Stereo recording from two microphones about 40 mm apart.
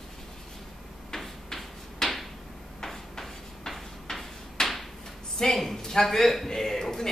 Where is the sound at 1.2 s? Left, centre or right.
Centre.